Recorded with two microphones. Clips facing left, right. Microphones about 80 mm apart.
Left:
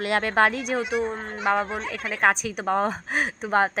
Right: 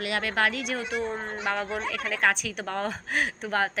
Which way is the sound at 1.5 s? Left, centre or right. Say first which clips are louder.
Left 6 dB; left.